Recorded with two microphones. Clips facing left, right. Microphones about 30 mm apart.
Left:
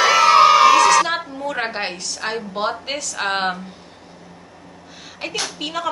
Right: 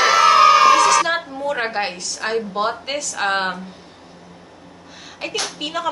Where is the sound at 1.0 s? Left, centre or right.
Centre.